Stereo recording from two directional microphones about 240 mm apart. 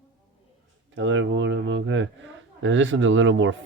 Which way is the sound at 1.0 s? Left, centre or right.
Right.